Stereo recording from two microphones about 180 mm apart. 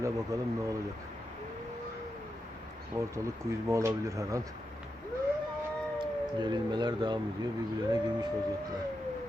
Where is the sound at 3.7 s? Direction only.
15° right (ahead or behind).